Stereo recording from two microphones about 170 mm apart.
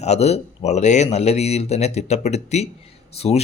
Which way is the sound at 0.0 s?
40° left (ahead or behind).